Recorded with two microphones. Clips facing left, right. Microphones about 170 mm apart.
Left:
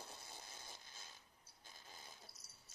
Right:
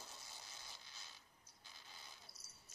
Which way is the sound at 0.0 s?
55° left (ahead or behind).